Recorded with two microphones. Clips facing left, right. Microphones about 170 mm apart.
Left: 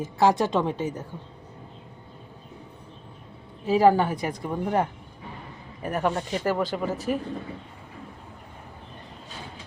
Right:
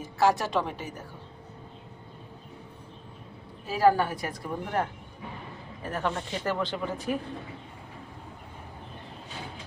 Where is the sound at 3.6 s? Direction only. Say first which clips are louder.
Left 4 dB; 20° left (ahead or behind); by 7.1 s 5° left (ahead or behind).